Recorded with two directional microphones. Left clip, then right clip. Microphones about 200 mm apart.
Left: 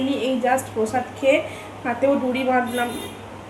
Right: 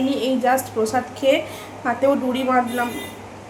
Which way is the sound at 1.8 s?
Centre (ahead or behind).